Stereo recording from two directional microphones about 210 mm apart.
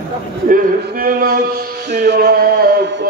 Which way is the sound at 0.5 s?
40° right (ahead or behind).